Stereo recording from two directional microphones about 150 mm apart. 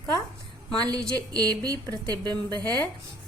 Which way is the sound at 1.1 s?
25° right (ahead or behind).